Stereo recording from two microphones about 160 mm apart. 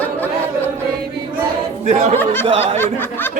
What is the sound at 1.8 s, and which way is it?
Speech, 45° right (ahead or behind).